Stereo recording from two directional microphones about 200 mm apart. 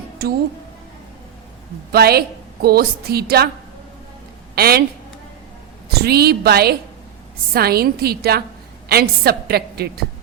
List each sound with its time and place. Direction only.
0.2 s a woman's voice: 50° right (ahead or behind)
1.9 s a woman's voice: 50° right (ahead or behind)
4.5 s speech: 50° right (ahead or behind)
5.9 s a woman's voice: 50° right (ahead or behind)